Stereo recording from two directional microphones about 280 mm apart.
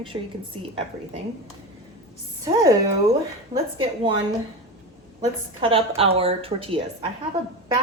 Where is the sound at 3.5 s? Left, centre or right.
Centre.